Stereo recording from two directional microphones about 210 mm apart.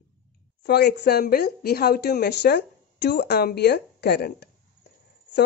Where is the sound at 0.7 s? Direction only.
50° left (ahead or behind).